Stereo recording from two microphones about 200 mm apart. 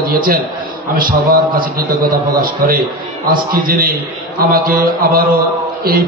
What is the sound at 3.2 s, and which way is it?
A man's voice, 45° right (ahead or behind).